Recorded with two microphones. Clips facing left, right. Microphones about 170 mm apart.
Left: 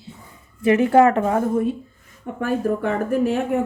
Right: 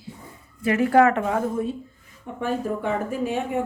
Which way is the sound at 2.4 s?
65° left (ahead or behind).